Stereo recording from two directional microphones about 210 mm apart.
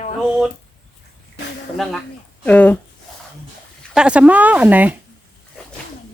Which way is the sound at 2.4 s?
5° left (ahead or behind).